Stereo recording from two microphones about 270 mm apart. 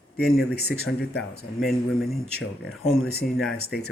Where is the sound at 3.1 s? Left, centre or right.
Left.